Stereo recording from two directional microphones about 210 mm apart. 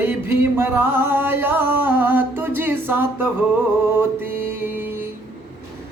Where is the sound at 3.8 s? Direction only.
10° right (ahead or behind).